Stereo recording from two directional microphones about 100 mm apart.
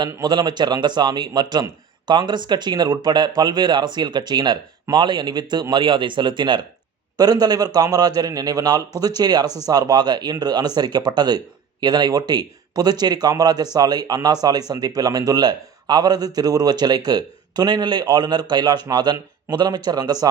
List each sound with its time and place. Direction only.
0.2 s a man's voice: 45° right (ahead or behind)